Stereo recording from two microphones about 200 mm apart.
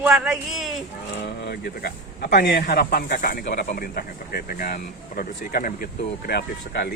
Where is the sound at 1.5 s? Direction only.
50° left (ahead or behind).